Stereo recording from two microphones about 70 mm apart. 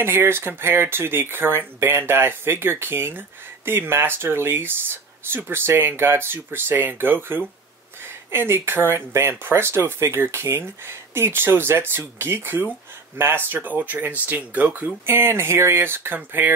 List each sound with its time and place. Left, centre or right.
0.0 s speech: right
15.0 s speech: right